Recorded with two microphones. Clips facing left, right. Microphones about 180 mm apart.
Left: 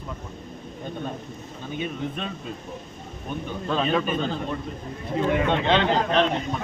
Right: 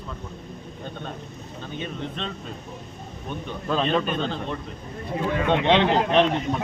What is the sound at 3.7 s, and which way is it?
Speech, 5° left (ahead or behind).